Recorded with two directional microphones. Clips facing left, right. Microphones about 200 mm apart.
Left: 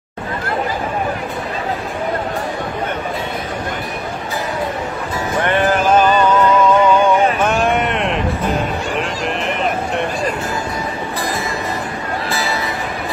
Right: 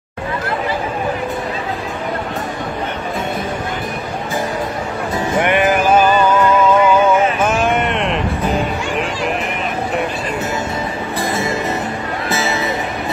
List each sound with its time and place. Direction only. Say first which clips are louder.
5.4 s music: right 1 dB; 15° right (ahead or behind)
12.3 s music: right 4 dB; 20° right (ahead or behind)